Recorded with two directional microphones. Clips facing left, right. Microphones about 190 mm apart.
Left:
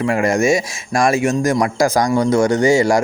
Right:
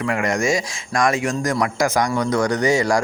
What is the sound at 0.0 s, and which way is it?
Speech, 25° left (ahead or behind).